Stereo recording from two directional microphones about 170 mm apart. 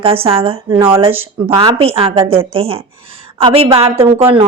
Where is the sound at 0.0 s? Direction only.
35° right (ahead or behind).